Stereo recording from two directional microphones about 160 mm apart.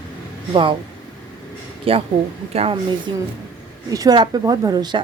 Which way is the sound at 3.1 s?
30° right (ahead or behind).